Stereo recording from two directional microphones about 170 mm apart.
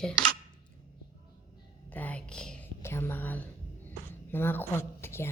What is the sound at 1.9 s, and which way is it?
Whispering, 10° left (ahead or behind).